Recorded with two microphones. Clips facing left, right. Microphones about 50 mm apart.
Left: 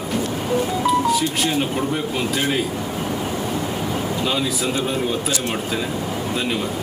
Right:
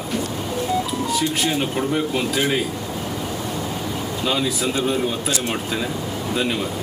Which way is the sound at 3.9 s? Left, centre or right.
Centre.